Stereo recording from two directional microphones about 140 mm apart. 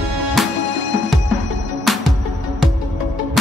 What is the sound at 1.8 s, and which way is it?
Music, centre (ahead or behind).